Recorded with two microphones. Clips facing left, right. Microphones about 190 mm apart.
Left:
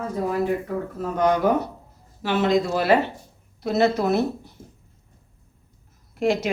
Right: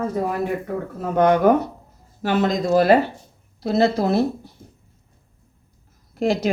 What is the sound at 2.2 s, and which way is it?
Speech, 40° right (ahead or behind).